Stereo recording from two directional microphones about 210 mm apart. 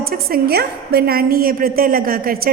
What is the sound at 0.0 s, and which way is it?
A woman's voice, 45° right (ahead or behind).